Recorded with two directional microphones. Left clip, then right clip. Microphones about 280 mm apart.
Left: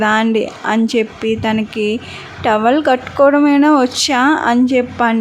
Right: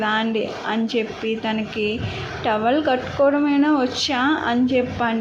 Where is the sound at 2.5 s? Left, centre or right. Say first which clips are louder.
Left 7 dB; left.